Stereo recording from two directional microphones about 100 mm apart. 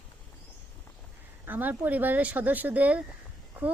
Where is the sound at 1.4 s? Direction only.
20° right (ahead or behind).